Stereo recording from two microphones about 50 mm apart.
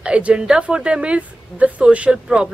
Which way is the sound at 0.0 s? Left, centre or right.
Right.